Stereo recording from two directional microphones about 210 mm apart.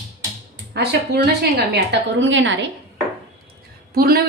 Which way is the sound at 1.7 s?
55° right (ahead or behind).